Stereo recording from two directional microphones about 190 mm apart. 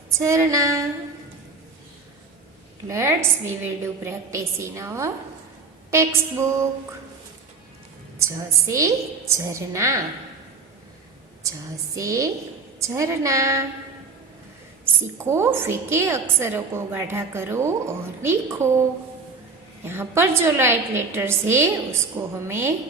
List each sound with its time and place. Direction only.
0.1 s a woman's voice: 15° right (ahead or behind)
2.9 s a woman's voice: 15° right (ahead or behind)
8.2 s a woman's voice: 15° right (ahead or behind)
11.4 s a woman's voice: 15° right (ahead or behind)
15.2 s a woman's voice: 15° right (ahead or behind)
19.8 s a woman's voice: 10° right (ahead or behind)